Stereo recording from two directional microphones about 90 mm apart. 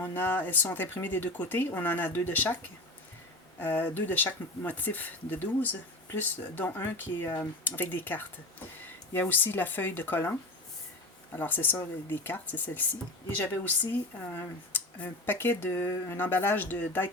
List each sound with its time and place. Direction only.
0.0 s speech: 20° left (ahead or behind)
3.6 s speech: 25° left (ahead or behind)
11.3 s speech: 20° left (ahead or behind)